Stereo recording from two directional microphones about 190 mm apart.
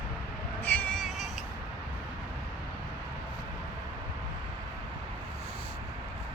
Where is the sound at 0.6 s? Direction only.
10° left (ahead or behind).